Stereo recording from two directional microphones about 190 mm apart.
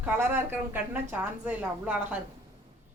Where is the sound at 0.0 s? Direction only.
10° right (ahead or behind).